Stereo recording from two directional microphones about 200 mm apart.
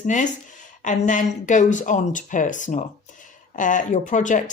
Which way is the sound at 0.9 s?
40° left (ahead or behind).